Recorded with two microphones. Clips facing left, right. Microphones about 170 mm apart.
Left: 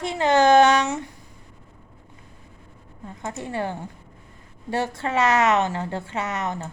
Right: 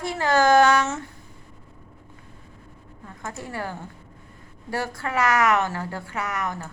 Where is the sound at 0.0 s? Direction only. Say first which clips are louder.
Left 2 dB; 20° left (ahead or behind).